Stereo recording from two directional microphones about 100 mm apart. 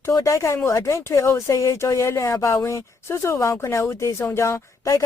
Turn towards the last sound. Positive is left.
turn(degrees=30)  # may be behind; listen again after turning